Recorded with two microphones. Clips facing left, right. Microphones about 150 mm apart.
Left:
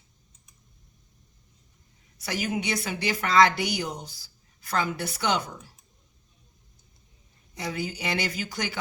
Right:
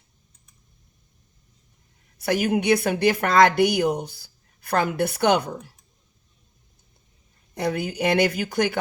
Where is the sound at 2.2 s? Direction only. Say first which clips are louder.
Right 8 dB; 55° right (ahead or behind).